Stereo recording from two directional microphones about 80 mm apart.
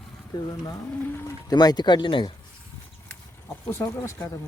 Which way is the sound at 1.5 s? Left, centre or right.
Left.